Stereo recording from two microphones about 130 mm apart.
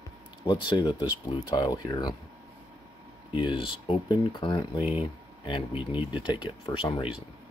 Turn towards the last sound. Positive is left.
turn(degrees=35)  # may be behind; listen again after turning